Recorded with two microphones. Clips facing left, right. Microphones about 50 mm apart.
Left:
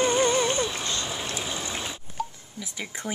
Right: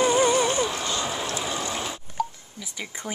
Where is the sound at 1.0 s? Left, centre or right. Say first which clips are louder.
Right 3 dB; right.